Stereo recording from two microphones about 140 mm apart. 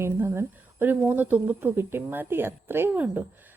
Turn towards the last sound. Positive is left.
turn(degrees=-15)  # may be behind; listen again after turning